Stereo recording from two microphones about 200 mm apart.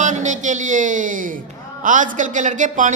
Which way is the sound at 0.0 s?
40° right (ahead or behind).